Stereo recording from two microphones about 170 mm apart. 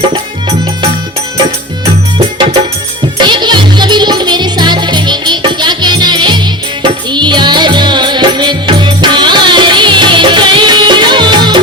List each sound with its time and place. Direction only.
2.1 s music: 25° right (ahead or behind)